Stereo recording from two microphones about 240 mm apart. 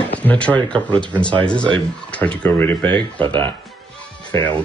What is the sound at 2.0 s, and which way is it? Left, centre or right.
Speech, centre.